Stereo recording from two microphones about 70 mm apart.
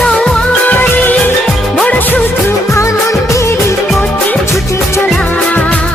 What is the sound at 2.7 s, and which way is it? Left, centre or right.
Music, left.